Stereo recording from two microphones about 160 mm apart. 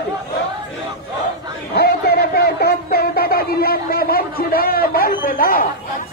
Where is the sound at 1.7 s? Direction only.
80° left.